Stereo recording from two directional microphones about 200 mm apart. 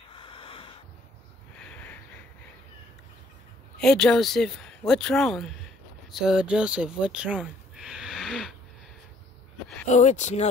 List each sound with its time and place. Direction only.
0.1 s snort: 25° left (ahead or behind)
3.8 s speech: 5° left (ahead or behind)
9.8 s speech: 35° left (ahead or behind)